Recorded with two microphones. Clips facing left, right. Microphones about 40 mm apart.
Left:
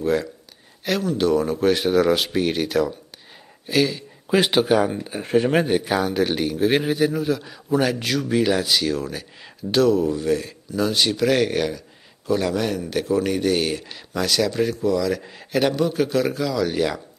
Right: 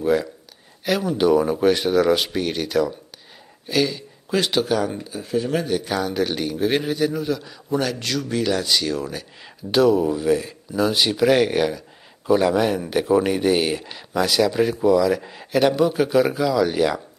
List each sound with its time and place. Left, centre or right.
0.0 s a man's voice: centre
1.7 s speech: centre
4.3 s speech: centre
5.0 s speech: left
5.7 s speech: left
5.9 s a man's voice: centre